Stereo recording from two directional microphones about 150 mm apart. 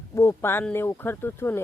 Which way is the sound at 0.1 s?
15° left (ahead or behind).